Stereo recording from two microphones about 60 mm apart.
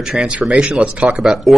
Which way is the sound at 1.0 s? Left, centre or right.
Centre.